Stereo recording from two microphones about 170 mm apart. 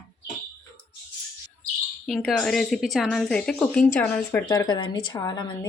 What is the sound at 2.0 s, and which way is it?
A woman's voice, centre (ahead or behind).